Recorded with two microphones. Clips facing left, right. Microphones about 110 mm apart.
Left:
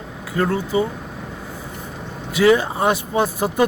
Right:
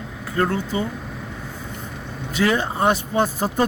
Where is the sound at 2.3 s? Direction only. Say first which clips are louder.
Left 5 dB; 10° left (ahead or behind).